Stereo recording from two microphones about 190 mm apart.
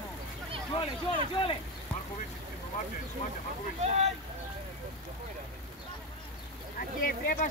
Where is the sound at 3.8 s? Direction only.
35° right (ahead or behind).